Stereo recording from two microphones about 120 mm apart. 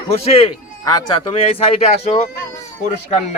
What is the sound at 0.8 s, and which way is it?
Speech, 35° left (ahead or behind).